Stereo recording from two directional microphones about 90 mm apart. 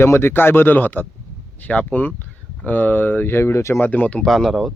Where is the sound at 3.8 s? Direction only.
20° left (ahead or behind).